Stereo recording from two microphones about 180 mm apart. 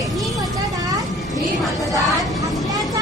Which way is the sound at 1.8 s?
20° left (ahead or behind).